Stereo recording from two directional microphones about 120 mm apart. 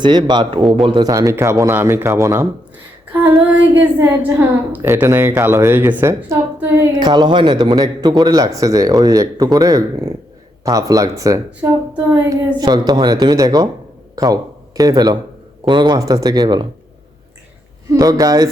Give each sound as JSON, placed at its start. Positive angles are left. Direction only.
{"t": 0.0, "sound": "speech", "side_deg": -40}
{"t": 1.0, "sound": "a woman's voice", "side_deg": -25}
{"t": 3.1, "sound": "child singing", "side_deg": -15}
{"t": 3.9, "sound": "a woman's voice", "side_deg": -15}
{"t": 7.1, "sound": "a woman's voice", "side_deg": -40}
{"t": 12.5, "sound": "speech", "side_deg": -35}
{"t": 14.8, "sound": "speech", "side_deg": -30}
{"t": 17.8, "sound": "a woman's voice", "side_deg": -30}